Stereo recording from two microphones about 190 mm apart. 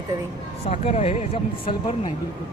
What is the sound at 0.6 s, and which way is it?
Speech, 35° left (ahead or behind).